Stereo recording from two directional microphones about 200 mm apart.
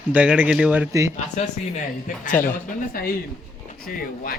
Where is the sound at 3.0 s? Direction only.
45° left (ahead or behind).